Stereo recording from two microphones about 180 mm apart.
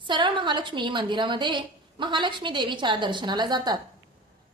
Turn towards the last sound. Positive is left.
turn(degrees=-20)  # may be behind; listen again after turning